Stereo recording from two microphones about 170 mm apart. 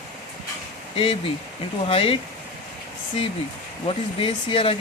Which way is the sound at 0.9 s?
35° left (ahead or behind).